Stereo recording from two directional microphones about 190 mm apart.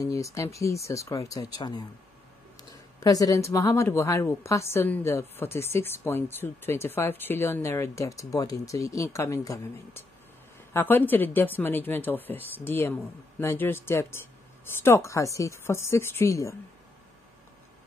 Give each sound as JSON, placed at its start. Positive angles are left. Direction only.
{"t": 0.0, "sound": "a woman's voice", "side_deg": 15}